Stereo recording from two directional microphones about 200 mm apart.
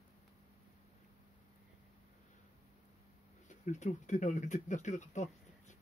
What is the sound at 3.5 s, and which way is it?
Speech, 35° left (ahead or behind).